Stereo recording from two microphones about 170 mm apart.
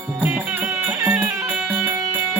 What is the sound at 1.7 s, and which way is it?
Music, 20° right (ahead or behind).